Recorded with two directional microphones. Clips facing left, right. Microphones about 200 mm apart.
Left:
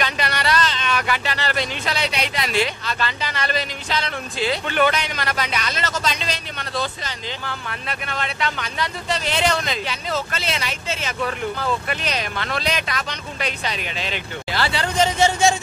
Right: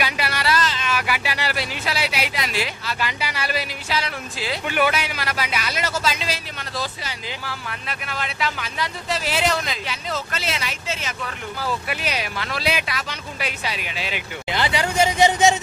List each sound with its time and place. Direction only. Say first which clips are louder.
0.0 s speech: left 1 dB; 5° right (ahead or behind)